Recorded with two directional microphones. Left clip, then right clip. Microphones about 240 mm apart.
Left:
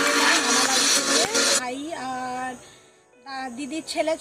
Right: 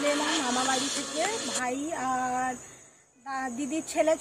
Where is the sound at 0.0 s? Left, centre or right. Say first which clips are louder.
Left 7 dB; left.